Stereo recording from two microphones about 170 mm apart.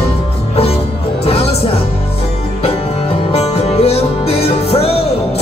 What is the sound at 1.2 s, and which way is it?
Music, 35° left (ahead or behind).